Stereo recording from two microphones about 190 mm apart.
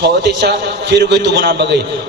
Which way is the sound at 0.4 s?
65° right (ahead or behind).